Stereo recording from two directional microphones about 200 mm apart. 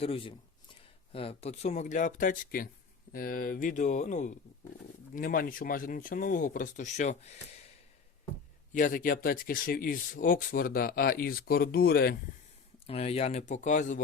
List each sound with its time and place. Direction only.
0.0 s speech: 25° left (ahead or behind)
8.7 s speech: 40° left (ahead or behind)
12.9 s speech: 30° left (ahead or behind)